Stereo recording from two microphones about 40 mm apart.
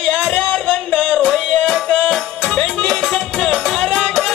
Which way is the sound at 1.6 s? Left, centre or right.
Centre.